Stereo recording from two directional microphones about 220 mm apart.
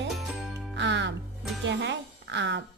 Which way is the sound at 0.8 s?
55° right (ahead or behind).